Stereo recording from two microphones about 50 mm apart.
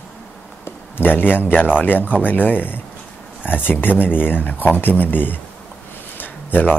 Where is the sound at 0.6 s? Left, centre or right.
Left.